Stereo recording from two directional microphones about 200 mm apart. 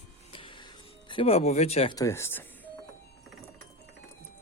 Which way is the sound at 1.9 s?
15° left (ahead or behind).